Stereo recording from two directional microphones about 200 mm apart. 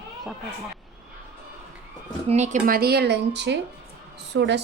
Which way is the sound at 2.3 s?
35° right (ahead or behind).